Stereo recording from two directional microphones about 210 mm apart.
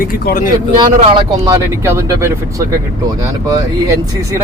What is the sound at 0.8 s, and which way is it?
Speech, 20° right (ahead or behind).